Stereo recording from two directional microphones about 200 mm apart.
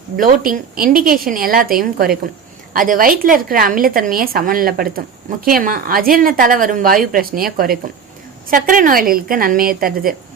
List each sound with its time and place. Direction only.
0.2 s a woman's voice: 45° right (ahead or behind)